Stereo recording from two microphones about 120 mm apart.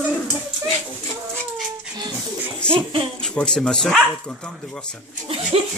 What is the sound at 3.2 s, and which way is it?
Speech, 5° left (ahead or behind).